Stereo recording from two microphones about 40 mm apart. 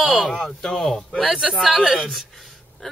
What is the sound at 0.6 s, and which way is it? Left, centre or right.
Speech, centre.